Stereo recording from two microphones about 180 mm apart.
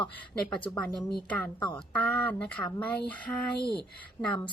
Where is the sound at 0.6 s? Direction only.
10° left (ahead or behind).